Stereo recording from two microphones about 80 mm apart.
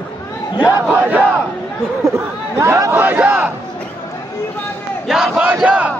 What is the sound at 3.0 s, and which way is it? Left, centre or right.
Battle cry, right.